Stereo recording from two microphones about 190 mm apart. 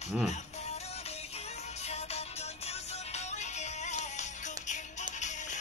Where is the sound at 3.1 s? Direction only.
35° left (ahead or behind).